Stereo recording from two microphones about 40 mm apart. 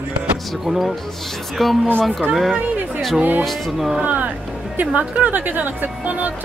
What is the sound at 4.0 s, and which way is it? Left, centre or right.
Speech, right.